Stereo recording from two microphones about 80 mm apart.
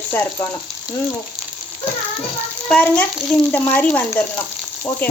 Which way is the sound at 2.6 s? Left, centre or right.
Centre.